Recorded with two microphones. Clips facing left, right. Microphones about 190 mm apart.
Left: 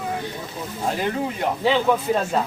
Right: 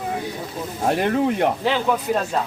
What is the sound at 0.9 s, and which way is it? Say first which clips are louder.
Speech: right 5 dB; 65° right (ahead or behind).